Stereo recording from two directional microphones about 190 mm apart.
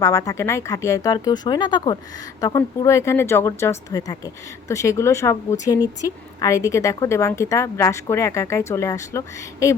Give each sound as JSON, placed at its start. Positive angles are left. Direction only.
{"t": 0.0, "sound": "speech", "side_deg": 15}